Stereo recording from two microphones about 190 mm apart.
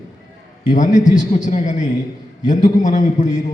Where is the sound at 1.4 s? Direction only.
40° left (ahead or behind).